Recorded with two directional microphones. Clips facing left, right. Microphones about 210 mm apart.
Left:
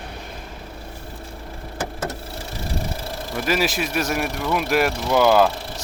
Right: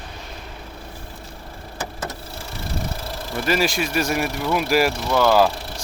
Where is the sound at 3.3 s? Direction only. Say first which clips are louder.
Right 1 dB; centre (ahead or behind).